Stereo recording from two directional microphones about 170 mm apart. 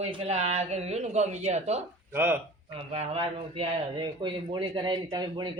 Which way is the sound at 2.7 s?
35° right (ahead or behind).